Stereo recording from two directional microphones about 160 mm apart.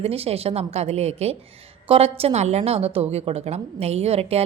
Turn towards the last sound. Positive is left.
turn(degrees=-40)  # may be behind; listen again after turning